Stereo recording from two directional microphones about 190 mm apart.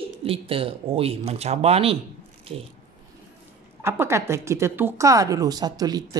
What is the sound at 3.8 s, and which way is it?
A woman's voice, 15° right (ahead or behind).